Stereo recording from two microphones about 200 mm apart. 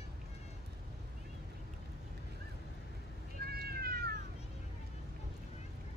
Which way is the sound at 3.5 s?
50° right (ahead or behind).